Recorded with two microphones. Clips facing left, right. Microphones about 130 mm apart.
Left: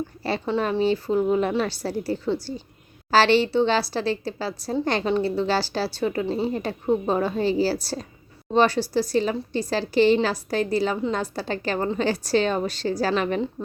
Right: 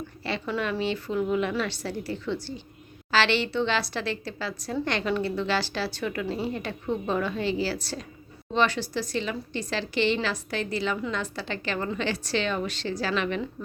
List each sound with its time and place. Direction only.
0.3 s speech: 35° left (ahead or behind)